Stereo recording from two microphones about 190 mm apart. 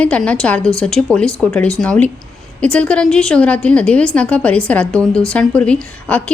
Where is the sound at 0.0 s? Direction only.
5° left (ahead or behind).